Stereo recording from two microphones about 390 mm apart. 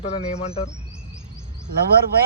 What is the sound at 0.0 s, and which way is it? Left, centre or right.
Speech, centre.